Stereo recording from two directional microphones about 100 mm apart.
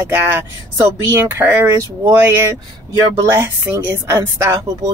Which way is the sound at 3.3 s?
20° right (ahead or behind).